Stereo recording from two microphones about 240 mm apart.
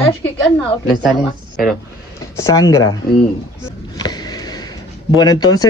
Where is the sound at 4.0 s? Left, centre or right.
Centre.